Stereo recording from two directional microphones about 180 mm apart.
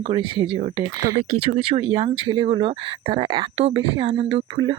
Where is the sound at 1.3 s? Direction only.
35° right (ahead or behind).